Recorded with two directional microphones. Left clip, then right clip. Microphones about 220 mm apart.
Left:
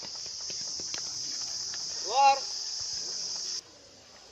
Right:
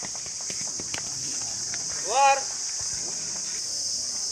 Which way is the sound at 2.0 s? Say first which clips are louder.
Right 2 dB; 45° left (ahead or behind).